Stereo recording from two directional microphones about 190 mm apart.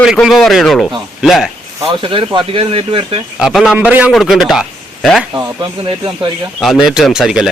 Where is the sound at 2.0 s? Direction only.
25° right (ahead or behind).